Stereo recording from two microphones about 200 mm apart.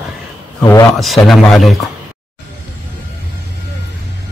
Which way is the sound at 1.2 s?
Centre (ahead or behind).